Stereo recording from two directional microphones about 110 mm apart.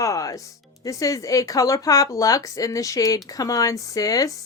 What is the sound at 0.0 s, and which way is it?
Music, 30° left (ahead or behind).